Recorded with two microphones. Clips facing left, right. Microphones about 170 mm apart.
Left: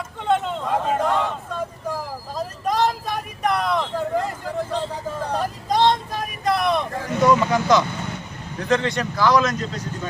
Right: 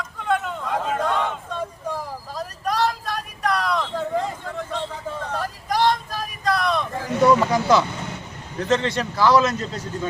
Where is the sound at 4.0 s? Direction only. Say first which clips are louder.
Left 1 dB; 5° left (ahead or behind).